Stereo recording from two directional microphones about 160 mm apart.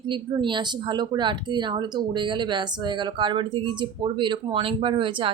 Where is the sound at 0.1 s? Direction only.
30° right (ahead or behind).